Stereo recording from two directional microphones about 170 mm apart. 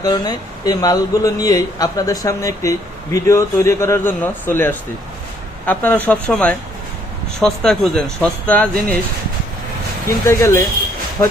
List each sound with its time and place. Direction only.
0.0 s a man's voice: 25° left (ahead or behind); by 8.7 s 5° left (ahead or behind)
10.1 s speech: 15° left (ahead or behind)